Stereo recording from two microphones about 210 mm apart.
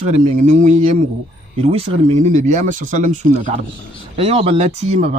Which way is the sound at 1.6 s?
30° right (ahead or behind).